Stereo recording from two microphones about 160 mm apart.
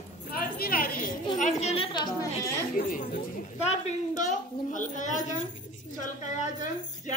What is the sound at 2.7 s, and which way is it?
Chatter, 60° left (ahead or behind).